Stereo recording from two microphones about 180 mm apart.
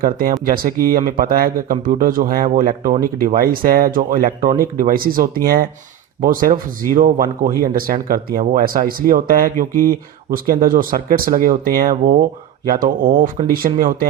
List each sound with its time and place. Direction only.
0.0 s speech: 55° right (ahead or behind)